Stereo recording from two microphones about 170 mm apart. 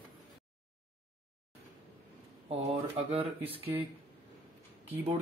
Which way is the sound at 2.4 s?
35° right (ahead or behind).